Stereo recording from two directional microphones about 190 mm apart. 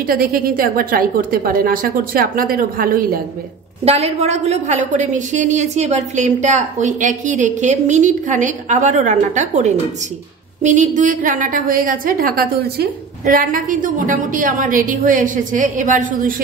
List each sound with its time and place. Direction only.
0.0 s a woman's voice: 50° right (ahead or behind)
3.8 s a woman's voice: 35° right (ahead or behind)